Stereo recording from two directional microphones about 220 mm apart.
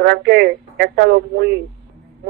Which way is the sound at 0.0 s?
50° right (ahead or behind).